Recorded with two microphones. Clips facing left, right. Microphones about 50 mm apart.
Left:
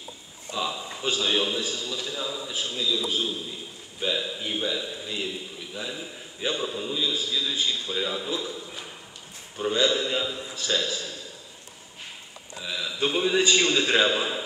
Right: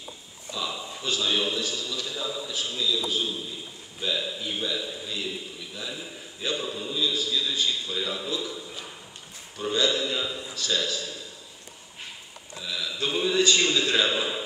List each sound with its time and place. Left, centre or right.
0.5 s a sound: left
1.0 s a man's voice: left
9.6 s a man's voice: left
12.6 s a man's voice: left